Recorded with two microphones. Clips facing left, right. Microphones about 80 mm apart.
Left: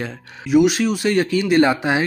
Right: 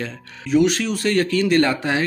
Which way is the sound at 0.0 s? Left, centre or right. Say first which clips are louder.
Left 1 dB; centre.